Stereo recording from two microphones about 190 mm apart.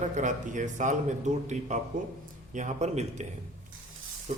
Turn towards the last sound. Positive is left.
turn(degrees=-40)  # may be behind; listen again after turning